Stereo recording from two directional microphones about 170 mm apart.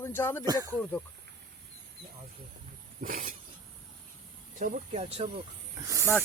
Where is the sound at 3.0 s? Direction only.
50° right (ahead or behind).